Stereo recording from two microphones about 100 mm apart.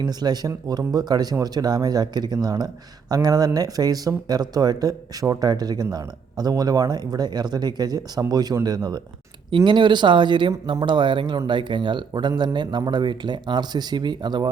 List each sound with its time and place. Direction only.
0.0 s speech: 45° right (ahead or behind)